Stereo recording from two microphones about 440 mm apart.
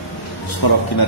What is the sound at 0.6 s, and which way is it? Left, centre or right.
Speech, left.